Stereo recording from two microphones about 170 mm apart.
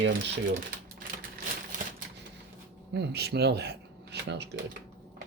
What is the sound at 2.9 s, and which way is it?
Speech, 75° right (ahead or behind).